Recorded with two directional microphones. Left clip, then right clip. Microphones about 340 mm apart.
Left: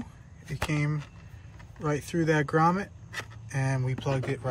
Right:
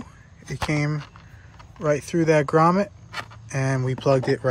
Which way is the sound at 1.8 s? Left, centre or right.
Centre.